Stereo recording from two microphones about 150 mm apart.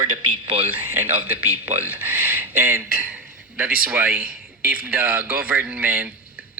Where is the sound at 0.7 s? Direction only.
15° right (ahead or behind).